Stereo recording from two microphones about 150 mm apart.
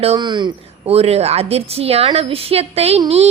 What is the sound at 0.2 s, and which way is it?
A woman's voice, 30° right (ahead or behind).